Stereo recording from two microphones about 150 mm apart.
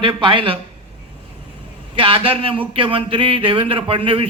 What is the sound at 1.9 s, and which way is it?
Speech, 35° right (ahead or behind).